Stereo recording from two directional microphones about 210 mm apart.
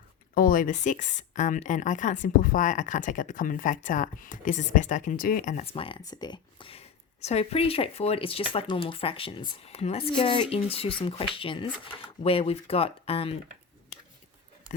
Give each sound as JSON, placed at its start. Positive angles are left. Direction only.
{"t": 0.3, "sound": "speech", "side_deg": 40}